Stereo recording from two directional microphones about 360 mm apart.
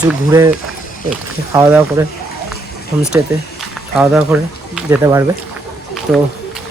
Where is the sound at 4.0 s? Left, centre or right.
Centre.